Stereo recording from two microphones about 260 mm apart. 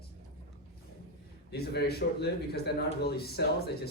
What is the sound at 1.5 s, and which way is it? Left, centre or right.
A man's voice, left.